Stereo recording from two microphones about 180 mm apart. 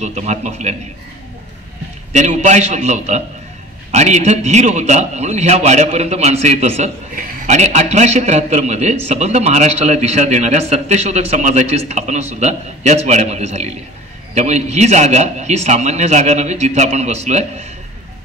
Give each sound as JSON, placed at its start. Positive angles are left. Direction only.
{"t": 0.0, "sound": "a man's voice", "side_deg": -40}
{"t": 2.1, "sound": "a man's voice", "side_deg": -40}